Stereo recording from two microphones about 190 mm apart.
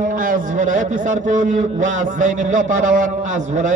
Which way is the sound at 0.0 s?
45° right (ahead or behind).